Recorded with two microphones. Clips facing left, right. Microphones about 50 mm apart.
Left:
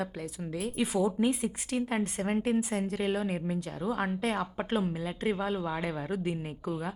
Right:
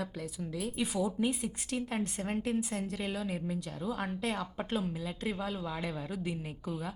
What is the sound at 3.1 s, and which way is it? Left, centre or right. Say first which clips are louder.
A woman's voice: left 5 dB; left.